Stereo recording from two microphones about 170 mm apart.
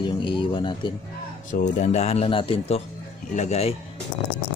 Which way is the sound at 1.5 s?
45° left (ahead or behind).